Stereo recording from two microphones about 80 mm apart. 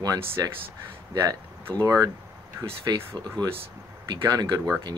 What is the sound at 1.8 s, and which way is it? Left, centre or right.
Speech, right.